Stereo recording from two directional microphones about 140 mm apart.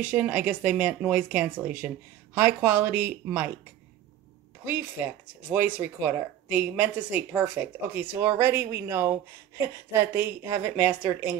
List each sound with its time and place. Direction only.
0.0 s speech: 10° right (ahead or behind)
4.6 s a woman's voice: 10° right (ahead or behind)